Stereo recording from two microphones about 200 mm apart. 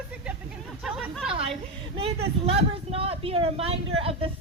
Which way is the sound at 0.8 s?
5° right (ahead or behind).